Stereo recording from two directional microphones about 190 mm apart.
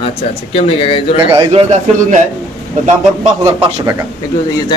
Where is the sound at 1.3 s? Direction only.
30° right (ahead or behind).